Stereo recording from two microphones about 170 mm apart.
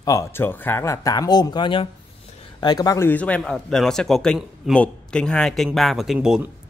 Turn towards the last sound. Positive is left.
turn(degrees=-10)  # may be behind; listen again after turning